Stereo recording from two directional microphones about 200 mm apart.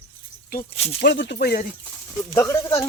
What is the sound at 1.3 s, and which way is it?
Speech, 45° left (ahead or behind).